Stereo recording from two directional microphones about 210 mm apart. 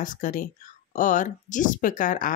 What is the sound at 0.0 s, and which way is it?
Speech, 40° left (ahead or behind).